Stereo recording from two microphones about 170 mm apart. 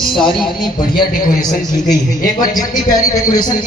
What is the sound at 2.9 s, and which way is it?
Speech, 20° left (ahead or behind).